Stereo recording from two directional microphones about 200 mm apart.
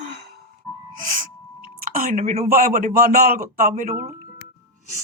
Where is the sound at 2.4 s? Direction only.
45° right (ahead or behind).